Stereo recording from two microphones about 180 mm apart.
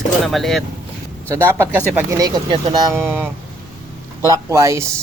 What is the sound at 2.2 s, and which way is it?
Speech, 25° right (ahead or behind).